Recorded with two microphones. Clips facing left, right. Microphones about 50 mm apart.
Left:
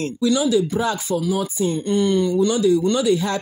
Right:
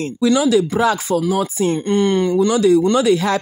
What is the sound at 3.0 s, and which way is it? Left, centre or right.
Speech, right.